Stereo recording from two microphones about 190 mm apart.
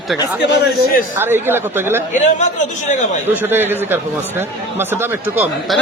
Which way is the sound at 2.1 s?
40° left (ahead or behind).